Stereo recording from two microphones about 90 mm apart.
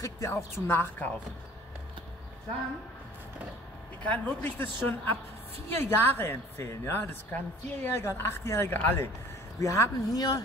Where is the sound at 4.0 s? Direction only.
20° left (ahead or behind).